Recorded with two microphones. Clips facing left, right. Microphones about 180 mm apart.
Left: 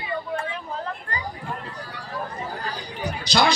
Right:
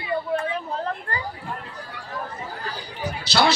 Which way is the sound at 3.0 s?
15° left (ahead or behind).